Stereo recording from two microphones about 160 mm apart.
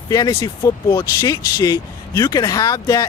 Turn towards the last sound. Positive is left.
turn(degrees=25)  # may be behind; listen again after turning